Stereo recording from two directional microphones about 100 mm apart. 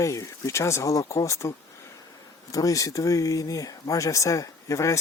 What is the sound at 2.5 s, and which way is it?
Speech, 35° left (ahead or behind).